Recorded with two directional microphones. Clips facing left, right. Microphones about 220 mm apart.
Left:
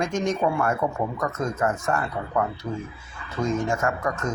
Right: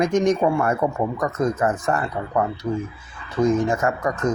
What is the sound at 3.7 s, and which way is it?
Speech, 20° right (ahead or behind).